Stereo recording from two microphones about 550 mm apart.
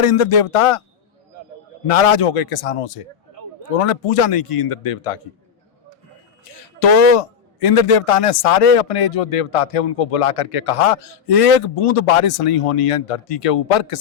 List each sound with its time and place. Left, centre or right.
0.0 s a man's voice: left
1.9 s a man's voice: left
6.4 s a man's voice: left